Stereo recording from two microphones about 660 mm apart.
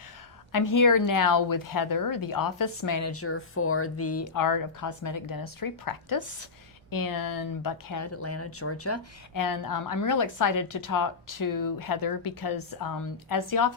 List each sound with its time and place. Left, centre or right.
0.5 s speech: left